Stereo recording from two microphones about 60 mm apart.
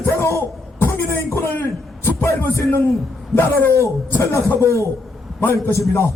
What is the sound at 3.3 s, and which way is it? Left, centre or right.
Speech, left.